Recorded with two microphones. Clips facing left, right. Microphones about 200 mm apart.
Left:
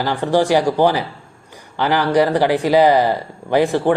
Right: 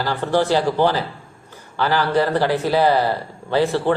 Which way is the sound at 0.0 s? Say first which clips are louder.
Left 3 dB; 15° left (ahead or behind).